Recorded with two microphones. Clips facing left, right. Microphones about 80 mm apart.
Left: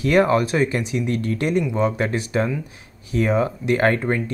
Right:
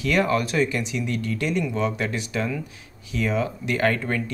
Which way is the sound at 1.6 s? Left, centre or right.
Left.